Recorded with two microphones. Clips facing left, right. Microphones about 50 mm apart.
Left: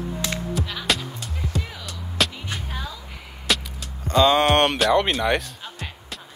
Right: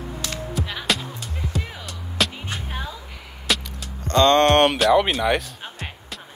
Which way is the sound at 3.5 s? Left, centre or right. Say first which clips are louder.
Even; centre.